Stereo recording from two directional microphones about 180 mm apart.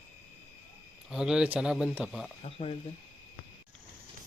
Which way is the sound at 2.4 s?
35° left (ahead or behind).